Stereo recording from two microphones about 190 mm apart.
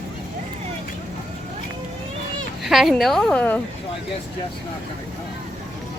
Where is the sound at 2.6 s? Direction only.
Centre (ahead or behind).